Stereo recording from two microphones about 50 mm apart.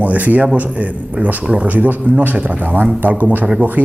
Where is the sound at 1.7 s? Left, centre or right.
Right.